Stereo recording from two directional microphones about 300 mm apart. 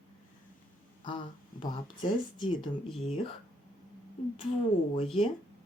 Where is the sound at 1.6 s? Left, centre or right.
Centre.